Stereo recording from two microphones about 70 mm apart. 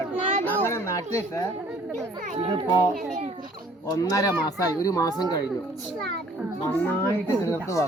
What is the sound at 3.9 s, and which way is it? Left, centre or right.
Speech, left.